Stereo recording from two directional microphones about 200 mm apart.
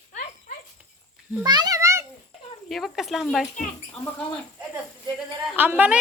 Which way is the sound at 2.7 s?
Centre (ahead or behind).